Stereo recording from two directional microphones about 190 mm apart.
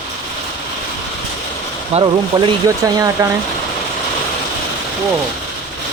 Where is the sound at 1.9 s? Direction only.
35° right (ahead or behind).